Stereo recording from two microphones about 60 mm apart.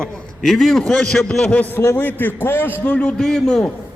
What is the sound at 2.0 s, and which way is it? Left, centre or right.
A man's voice, left.